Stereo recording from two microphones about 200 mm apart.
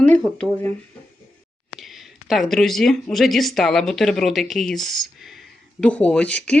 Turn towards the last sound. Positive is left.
turn(degrees=5)  # may be behind; listen again after turning